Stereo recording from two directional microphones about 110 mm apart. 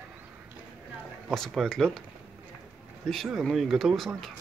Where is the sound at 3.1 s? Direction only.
Centre (ahead or behind).